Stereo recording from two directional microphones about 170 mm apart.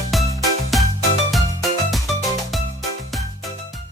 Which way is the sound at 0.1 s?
Centre (ahead or behind).